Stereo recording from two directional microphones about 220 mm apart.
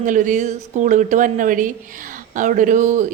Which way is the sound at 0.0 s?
35° right (ahead or behind).